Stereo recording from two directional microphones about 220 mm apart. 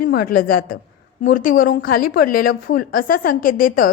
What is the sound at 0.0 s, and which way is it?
A woman's voice, 40° left (ahead or behind).